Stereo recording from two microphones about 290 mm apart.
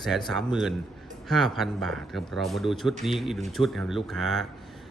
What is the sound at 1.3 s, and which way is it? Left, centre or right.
A man's voice, centre.